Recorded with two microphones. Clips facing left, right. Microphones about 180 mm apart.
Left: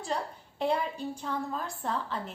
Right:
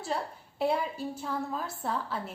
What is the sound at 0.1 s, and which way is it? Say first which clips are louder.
A woman's voice: left 1 dB; 5° right (ahead or behind).